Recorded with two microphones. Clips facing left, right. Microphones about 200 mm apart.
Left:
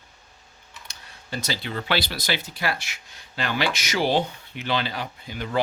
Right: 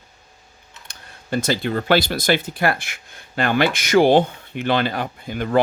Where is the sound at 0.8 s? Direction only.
50° right (ahead or behind).